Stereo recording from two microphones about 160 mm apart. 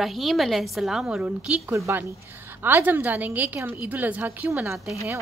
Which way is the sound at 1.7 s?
15° right (ahead or behind).